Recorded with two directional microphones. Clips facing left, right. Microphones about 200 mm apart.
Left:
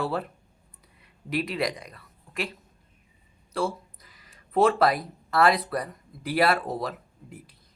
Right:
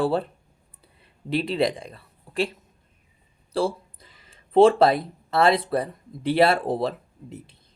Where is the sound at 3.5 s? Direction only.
30° right (ahead or behind).